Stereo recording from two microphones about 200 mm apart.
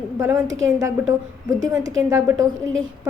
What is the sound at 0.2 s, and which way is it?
A woman's voice, 10° right (ahead or behind).